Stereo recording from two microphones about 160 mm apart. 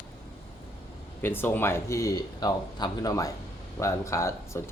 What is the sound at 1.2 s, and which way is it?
Speech, 15° left (ahead or behind).